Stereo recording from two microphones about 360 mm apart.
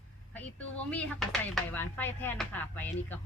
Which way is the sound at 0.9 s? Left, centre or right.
Centre.